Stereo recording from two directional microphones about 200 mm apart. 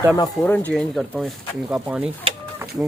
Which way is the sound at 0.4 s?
10° left (ahead or behind).